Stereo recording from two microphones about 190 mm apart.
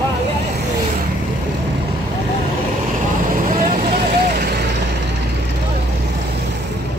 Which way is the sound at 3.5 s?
45° right (ahead or behind).